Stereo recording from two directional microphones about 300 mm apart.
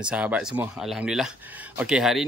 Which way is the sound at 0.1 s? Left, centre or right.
Centre.